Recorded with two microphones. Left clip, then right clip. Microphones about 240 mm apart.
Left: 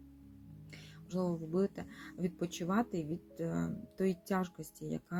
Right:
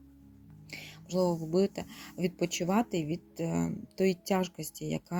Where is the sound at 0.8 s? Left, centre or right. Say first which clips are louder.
Right 9 dB; right.